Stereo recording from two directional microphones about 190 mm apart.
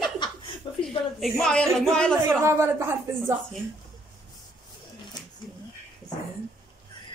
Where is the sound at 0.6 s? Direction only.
25° left (ahead or behind).